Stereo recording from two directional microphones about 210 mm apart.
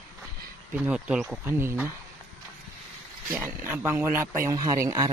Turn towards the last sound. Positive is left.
turn(degrees=-15)  # may be behind; listen again after turning